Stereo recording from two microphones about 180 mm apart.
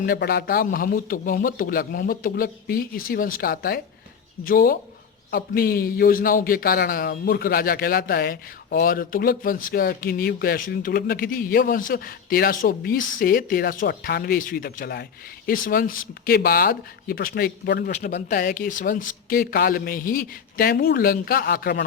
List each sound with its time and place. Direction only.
0.0 s a man's voice: 55° left (ahead or behind)